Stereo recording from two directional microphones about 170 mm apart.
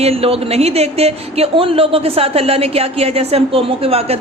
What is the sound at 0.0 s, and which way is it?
Speech, 35° right (ahead or behind).